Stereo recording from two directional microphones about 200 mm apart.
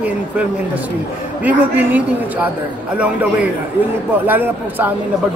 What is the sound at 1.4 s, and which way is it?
A man's voice, 10° right (ahead or behind).